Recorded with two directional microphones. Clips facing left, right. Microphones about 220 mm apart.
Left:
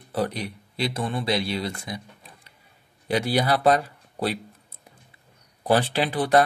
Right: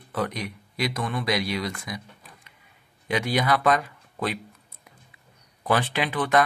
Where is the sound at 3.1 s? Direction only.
35° left (ahead or behind).